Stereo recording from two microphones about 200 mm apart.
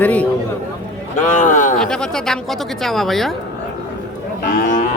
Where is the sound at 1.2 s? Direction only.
40° left (ahead or behind).